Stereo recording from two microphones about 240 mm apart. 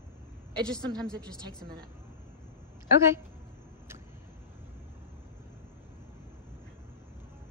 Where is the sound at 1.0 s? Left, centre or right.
Centre.